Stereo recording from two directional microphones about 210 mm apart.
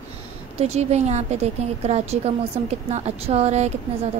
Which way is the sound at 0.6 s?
30° right (ahead or behind).